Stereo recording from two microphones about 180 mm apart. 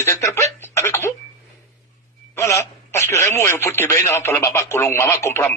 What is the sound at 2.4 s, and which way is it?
Speech, 15° left (ahead or behind).